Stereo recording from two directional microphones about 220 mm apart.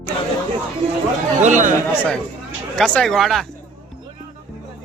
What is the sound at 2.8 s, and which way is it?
Speech, centre (ahead or behind).